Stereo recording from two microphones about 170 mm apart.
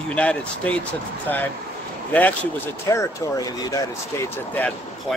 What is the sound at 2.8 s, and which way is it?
Speech, 15° left (ahead or behind).